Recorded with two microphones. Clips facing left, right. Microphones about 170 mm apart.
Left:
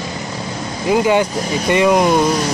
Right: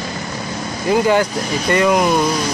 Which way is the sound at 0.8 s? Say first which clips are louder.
Even; 10° left (ahead or behind).